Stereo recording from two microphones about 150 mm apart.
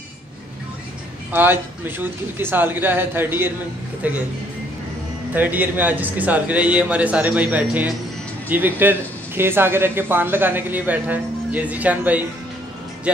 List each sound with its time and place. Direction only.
1.3 s a man's voice: 15° right (ahead or behind)
5.3 s a man's voice: 10° right (ahead or behind)